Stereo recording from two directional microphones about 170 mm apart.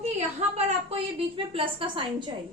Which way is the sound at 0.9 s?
30° right (ahead or behind).